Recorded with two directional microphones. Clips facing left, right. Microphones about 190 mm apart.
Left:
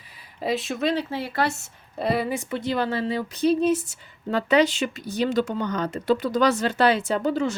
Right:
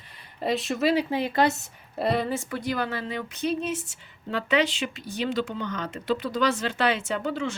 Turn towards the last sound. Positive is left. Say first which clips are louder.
# left 5 dB
turn(degrees=40)  # may be behind; listen again after turning